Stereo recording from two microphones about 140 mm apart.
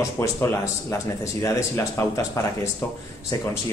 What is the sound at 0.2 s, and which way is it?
A man's voice, 20° left (ahead or behind).